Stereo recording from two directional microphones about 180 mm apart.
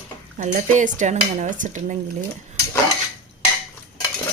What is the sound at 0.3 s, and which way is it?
Speech, 45° right (ahead or behind).